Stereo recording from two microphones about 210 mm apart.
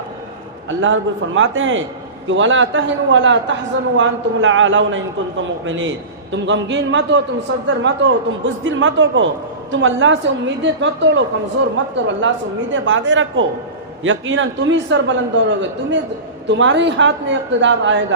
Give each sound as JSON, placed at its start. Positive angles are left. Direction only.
{"t": 0.8, "sound": "a man's voice", "side_deg": -65}